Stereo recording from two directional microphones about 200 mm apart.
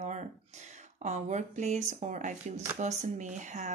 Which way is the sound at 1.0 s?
35° right (ahead or behind).